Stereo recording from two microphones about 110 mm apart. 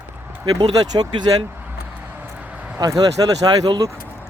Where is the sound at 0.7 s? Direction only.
40° right (ahead or behind).